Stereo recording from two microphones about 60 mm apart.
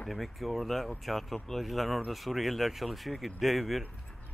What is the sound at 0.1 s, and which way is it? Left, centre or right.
Speech, centre.